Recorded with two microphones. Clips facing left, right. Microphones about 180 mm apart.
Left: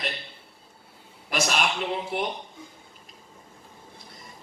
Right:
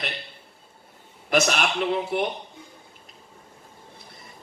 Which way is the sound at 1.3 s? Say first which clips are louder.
Right 4 dB; 50° right (ahead or behind).